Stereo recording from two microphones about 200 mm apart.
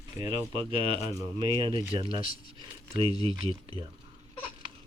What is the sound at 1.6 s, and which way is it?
Speech, 25° right (ahead or behind).